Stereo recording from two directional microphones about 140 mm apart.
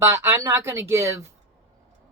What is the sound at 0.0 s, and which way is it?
Speech, 20° right (ahead or behind).